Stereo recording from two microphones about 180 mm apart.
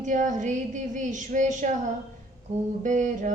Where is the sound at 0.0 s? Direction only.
45° right (ahead or behind).